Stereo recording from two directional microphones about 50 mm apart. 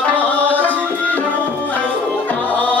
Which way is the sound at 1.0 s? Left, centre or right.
Left.